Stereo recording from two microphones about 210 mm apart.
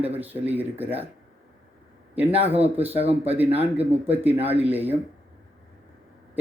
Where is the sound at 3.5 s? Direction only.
10° right (ahead or behind).